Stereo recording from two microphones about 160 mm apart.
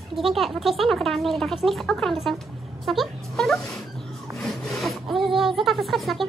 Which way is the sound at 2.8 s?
Centre (ahead or behind).